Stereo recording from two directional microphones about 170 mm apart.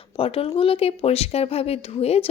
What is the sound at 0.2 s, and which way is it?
A woman's voice, 35° left (ahead or behind).